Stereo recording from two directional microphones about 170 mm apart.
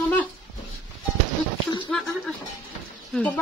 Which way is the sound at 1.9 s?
5° left (ahead or behind).